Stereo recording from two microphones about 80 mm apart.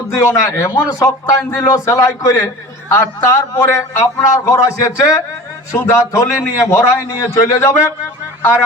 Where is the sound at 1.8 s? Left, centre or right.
Left.